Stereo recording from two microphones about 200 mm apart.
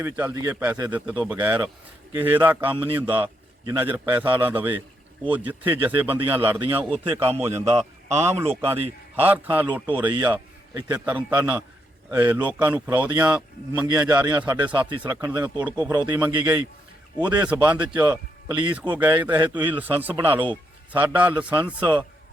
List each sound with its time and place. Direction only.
0.0 s speech: 10° right (ahead or behind)
7.6 s a man's voice: 35° right (ahead or behind)
9.1 s speech: 10° right (ahead or behind)
13.7 s speech: 20° right (ahead or behind)
14.8 s speech: 20° right (ahead or behind)
15.1 s speech: 10° right (ahead or behind)